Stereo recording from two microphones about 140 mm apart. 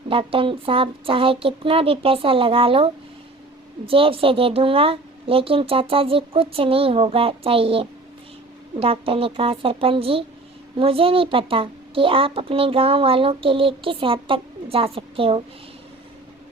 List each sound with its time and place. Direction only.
0.1 s a child's voice: 40° right (ahead or behind)